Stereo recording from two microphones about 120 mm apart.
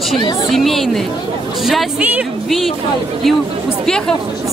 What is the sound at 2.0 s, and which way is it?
Speech, 10° right (ahead or behind).